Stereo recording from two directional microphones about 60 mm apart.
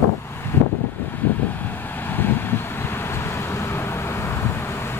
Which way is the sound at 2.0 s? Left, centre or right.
Left.